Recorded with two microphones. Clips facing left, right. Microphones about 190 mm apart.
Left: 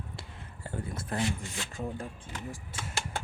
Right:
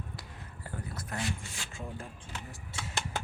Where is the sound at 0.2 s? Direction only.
25° left (ahead or behind).